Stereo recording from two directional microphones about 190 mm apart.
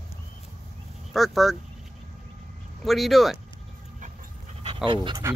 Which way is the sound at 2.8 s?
Centre (ahead or behind).